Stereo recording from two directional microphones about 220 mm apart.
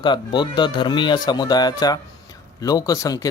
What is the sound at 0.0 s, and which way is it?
A man's voice, 20° left (ahead or behind).